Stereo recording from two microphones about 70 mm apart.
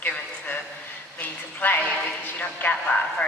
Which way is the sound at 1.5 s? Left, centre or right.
Left.